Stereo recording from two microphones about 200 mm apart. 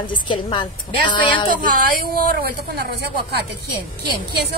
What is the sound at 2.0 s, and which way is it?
Speech, 50° right (ahead or behind).